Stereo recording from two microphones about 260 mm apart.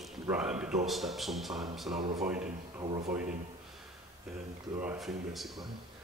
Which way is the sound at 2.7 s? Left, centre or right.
Centre.